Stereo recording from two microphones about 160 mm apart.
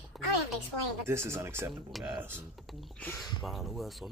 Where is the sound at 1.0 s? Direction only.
15° right (ahead or behind).